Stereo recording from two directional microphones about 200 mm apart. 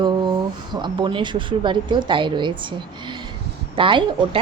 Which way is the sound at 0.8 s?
25° right (ahead or behind).